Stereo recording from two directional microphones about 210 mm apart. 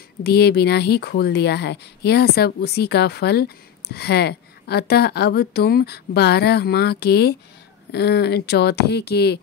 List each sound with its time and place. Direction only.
0.2 s speech: 50° left (ahead or behind)